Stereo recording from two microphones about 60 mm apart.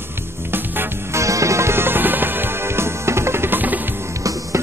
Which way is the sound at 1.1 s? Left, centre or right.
Right.